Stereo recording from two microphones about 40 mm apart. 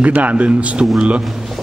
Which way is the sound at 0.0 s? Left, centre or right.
Right.